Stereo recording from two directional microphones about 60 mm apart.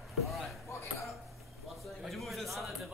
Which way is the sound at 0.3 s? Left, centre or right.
Centre.